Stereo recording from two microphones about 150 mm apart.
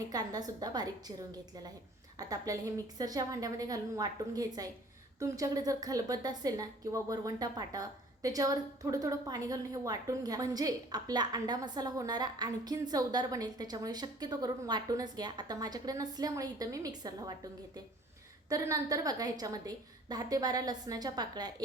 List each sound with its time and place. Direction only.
0.1 s a woman's voice: 25° right (ahead or behind)
18.4 s a woman's voice: 20° right (ahead or behind)